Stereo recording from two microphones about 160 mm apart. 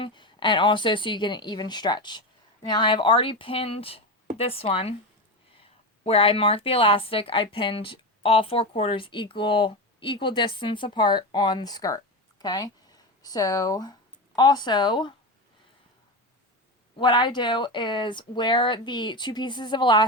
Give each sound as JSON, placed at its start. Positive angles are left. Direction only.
{"t": 0.0, "sound": "a woman's voice", "side_deg": 30}
{"t": 6.1, "sound": "a woman's voice", "side_deg": 35}
{"t": 17.0, "sound": "speech", "side_deg": 30}